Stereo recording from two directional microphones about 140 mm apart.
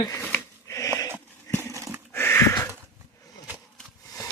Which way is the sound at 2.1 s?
15° left (ahead or behind).